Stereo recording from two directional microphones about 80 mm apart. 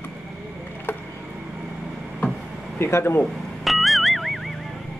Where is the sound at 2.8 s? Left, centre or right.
Left.